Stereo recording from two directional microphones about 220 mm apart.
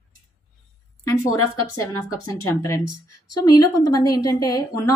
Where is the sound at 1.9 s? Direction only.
15° left (ahead or behind).